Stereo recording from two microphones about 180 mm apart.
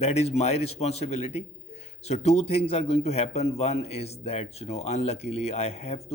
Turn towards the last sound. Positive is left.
turn(degrees=35)  # may be behind; listen again after turning